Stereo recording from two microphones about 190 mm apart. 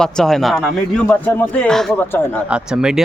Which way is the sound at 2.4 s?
5° right (ahead or behind).